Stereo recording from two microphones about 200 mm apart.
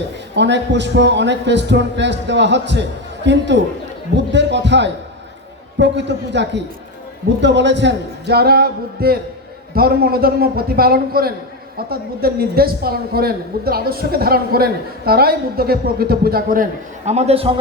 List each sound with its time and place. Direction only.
0.3 s a man's voice: 60° right (ahead or behind)
17.1 s a man's voice: 30° right (ahead or behind)